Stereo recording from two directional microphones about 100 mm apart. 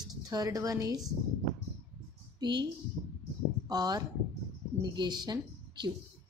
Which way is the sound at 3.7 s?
40° right (ahead or behind).